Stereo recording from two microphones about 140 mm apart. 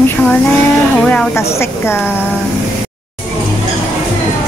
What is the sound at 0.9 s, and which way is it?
A woman's voice, 10° left (ahead or behind).